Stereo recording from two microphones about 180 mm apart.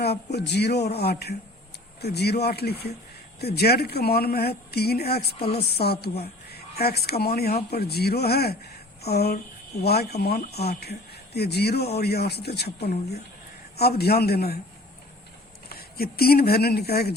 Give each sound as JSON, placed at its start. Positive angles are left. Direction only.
{"t": 0.0, "sound": "speech", "side_deg": 65}
{"t": 15.7, "sound": "speech", "side_deg": 60}